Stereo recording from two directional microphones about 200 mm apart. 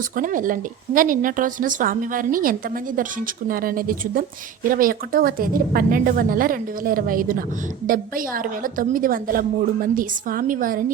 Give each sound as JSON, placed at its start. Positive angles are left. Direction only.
{"t": 0.2, "sound": "a woman's voice", "side_deg": -40}